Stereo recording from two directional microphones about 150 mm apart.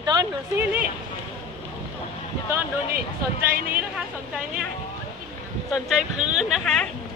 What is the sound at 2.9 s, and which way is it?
Speech, 80° right.